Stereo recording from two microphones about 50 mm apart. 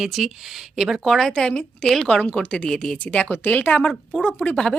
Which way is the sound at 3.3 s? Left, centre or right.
Left.